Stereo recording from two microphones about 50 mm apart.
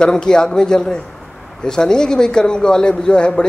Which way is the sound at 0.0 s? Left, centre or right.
Centre.